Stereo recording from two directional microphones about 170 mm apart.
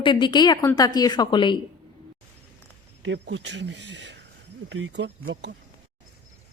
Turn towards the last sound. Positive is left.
turn(degrees=-90)